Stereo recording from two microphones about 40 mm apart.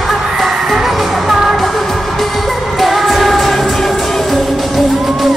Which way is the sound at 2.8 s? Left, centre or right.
Centre.